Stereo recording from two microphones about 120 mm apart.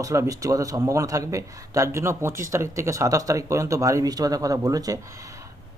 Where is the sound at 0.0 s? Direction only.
25° right (ahead or behind).